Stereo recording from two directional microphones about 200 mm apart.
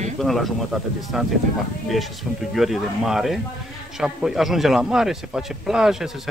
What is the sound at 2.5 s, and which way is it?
Speech, centre (ahead or behind).